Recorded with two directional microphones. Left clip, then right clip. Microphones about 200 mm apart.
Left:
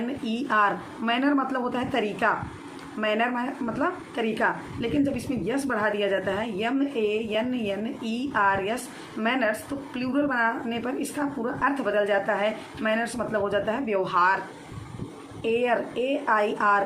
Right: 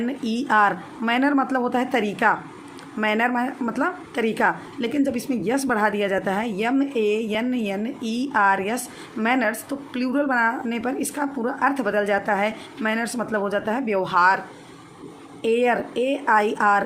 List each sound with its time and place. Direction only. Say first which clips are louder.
0.3 s a woman's voice: right 4 dB; 45° right (ahead or behind)
15.4 s a woman's voice: right 4 dB; 45° right (ahead or behind)